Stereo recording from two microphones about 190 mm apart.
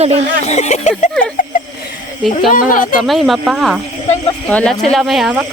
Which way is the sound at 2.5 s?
45° left (ahead or behind).